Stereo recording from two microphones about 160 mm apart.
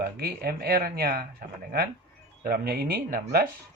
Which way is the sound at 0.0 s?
80° right.